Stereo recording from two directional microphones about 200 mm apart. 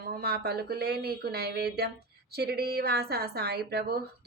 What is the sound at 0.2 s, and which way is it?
A woman's voice, 50° right (ahead or behind).